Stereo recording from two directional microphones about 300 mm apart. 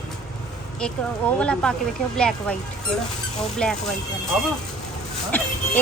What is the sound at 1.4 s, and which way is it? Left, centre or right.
Speech, centre.